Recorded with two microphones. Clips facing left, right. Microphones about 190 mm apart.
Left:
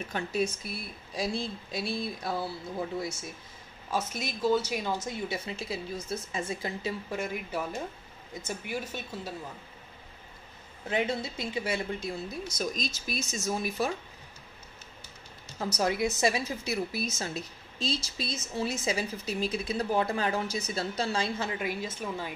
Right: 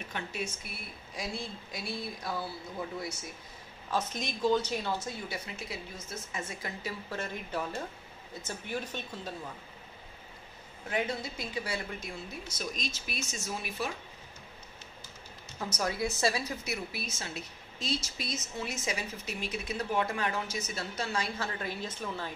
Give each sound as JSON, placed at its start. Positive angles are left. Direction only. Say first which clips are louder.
{"t": 0.1, "sound": "speech", "louder": "left 8 dB", "side_deg": 35}
{"t": 3.9, "sound": "speech", "louder": "left 1 dB", "side_deg": 5}
{"t": 7.1, "sound": "speech", "louder": "left 4 dB", "side_deg": 10}
{"t": 10.9, "sound": "speech", "louder": "left 3 dB", "side_deg": 25}
{"t": 12.4, "sound": "speech", "louder": "left 4 dB", "side_deg": 40}
{"t": 15.6, "sound": "speech", "louder": "left 4 dB", "side_deg": 30}
{"t": 16.6, "sound": "speech", "louder": "left 6 dB", "side_deg": 35}
{"t": 17.7, "sound": "speech", "louder": "left 2 dB", "side_deg": 30}
{"t": 21.5, "sound": "speech", "louder": "left 4 dB", "side_deg": 15}